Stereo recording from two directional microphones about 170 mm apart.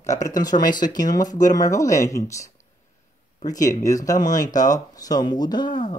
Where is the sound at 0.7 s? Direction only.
50° left (ahead or behind).